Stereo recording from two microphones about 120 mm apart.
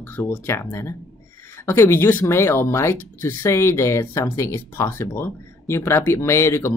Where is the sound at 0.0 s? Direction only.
15° left (ahead or behind).